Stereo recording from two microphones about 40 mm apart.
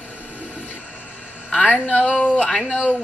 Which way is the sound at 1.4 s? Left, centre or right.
Left.